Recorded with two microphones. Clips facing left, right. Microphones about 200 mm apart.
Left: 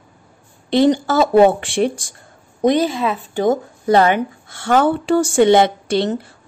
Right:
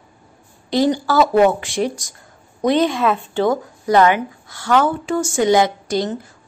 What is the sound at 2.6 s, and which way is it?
Speech, 10° left (ahead or behind).